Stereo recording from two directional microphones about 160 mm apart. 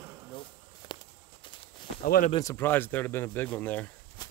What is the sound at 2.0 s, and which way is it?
Speech, 65° left (ahead or behind).